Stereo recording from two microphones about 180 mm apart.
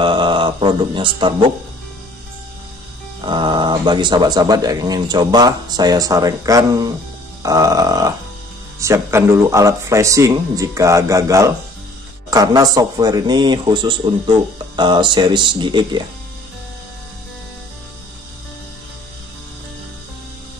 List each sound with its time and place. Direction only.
0.0 s mantra: 25° right (ahead or behind)
3.2 s a man's voice: 25° right (ahead or behind)